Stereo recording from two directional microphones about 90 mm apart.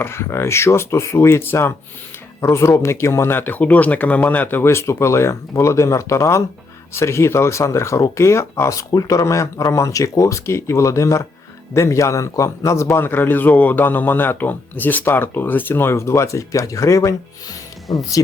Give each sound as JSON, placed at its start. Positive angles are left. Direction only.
{"t": 0.0, "sound": "a man's voice", "side_deg": 30}
{"t": 17.9, "sound": "speech", "side_deg": 60}